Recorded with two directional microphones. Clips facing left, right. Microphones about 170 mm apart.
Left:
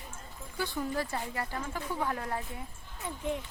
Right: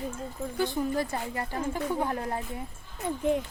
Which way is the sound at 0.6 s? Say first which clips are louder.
Right 5 dB; 20° right (ahead or behind).